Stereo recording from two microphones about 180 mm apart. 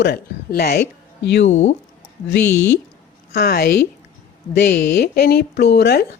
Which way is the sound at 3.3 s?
60° left (ahead or behind).